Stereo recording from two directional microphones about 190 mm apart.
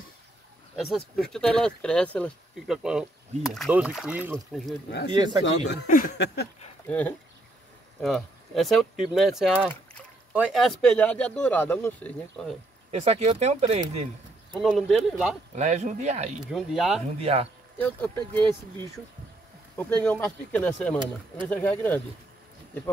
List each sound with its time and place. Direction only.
0.7 s speech: centre (ahead or behind)
5.1 s speech: 25° right (ahead or behind)
5.7 s speech: 55° left (ahead or behind)
6.9 s speech: 10° left (ahead or behind)
12.9 s speech: 35° right (ahead or behind)
14.5 s speech: centre (ahead or behind)
15.5 s speech: 35° right (ahead or behind)
16.4 s speech: centre (ahead or behind)
17.2 s speech: 30° right (ahead or behind)
17.7 s speech: 10° left (ahead or behind)
19.9 s speech: 5° left (ahead or behind)